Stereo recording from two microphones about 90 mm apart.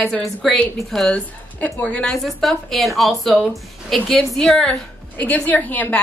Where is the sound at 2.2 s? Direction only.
Centre (ahead or behind).